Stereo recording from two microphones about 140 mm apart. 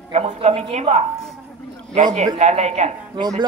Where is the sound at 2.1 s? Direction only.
55° right (ahead or behind).